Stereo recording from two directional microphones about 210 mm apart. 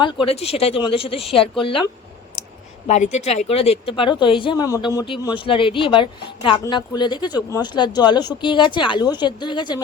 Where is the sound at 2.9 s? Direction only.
35° left (ahead or behind).